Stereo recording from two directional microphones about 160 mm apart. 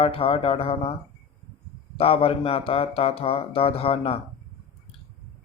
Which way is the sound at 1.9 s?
35° left (ahead or behind).